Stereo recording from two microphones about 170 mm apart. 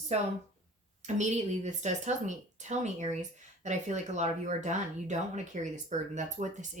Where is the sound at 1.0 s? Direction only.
45° right (ahead or behind).